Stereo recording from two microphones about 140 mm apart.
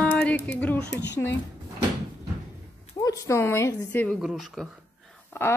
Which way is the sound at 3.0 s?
20° left (ahead or behind).